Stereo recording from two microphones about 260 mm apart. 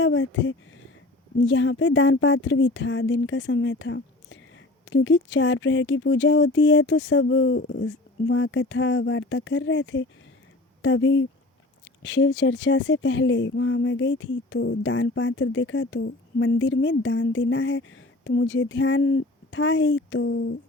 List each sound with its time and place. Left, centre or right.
0.0 s speech: left